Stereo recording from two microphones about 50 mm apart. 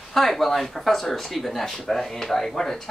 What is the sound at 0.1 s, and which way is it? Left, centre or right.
Speech, centre.